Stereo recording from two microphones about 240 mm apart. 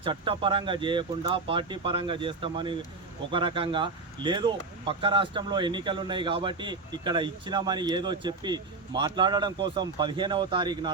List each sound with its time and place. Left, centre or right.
0.0 s speech: right